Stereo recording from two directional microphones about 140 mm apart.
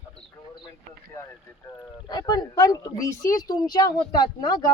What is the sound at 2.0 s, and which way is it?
Speech, 30° left (ahead or behind).